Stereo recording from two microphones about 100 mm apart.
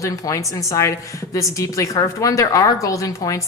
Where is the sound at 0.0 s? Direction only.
35° left (ahead or behind).